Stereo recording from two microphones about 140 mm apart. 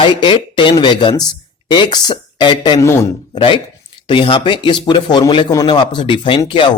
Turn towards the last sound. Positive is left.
turn(degrees=35)  # may be behind; listen again after turning